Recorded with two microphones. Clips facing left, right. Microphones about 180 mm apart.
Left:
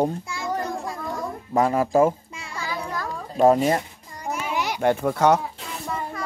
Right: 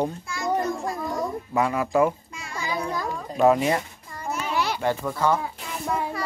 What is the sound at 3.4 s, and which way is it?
Speech, 40° left (ahead or behind).